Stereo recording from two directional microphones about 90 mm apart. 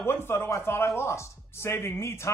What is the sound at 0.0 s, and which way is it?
A man's voice, 25° left (ahead or behind).